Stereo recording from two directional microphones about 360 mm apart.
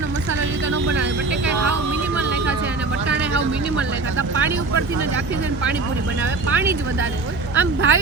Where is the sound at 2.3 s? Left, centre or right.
Right.